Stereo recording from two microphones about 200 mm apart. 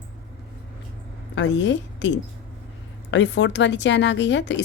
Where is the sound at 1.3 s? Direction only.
65° left (ahead or behind).